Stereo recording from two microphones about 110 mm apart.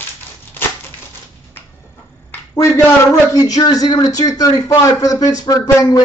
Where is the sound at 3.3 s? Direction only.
35° left (ahead or behind).